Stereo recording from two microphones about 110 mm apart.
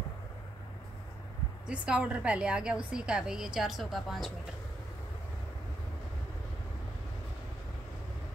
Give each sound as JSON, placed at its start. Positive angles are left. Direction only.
{"t": 1.7, "sound": "a woman's voice", "side_deg": -10}